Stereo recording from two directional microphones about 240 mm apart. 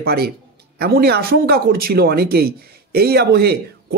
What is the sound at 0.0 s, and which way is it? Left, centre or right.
Speech, right.